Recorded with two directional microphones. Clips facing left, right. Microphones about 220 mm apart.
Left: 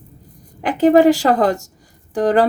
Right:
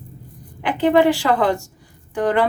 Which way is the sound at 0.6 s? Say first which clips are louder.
Left 4 dB; 40° left (ahead or behind).